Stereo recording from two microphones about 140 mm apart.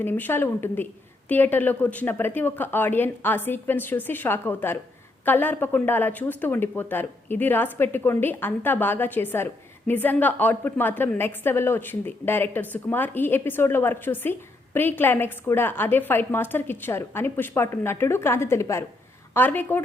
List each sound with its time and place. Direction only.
0.0 s speech: 15° left (ahead or behind)